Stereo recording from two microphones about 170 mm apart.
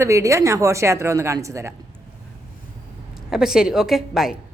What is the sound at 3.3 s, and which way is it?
A woman's voice, 5° right (ahead or behind).